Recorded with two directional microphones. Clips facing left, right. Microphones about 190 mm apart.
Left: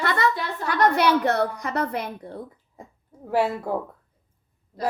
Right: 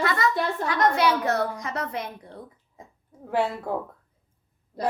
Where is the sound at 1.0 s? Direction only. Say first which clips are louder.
Left 2 dB; 60° left (ahead or behind).